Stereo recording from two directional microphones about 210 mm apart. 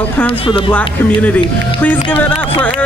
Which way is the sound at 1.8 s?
10° left (ahead or behind).